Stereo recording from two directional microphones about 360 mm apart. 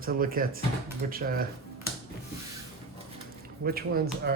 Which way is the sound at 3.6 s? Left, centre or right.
Right.